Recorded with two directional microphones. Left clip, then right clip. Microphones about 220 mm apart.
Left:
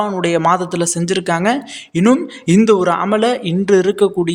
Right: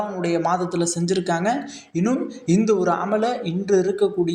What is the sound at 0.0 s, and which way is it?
A man's voice, 35° left (ahead or behind).